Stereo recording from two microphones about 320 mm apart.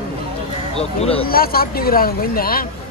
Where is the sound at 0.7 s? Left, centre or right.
Centre.